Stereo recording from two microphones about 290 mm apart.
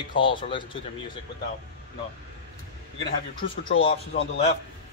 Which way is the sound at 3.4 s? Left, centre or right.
Centre.